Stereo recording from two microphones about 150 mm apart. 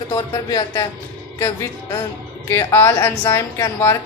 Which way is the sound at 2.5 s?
15° left (ahead or behind).